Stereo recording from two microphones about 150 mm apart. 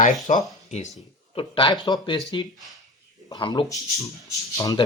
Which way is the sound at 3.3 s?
30° left (ahead or behind).